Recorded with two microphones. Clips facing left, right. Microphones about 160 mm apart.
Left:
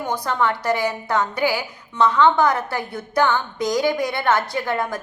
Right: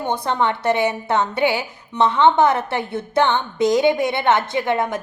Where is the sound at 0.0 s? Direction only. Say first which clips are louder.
Right 2 dB; 20° right (ahead or behind).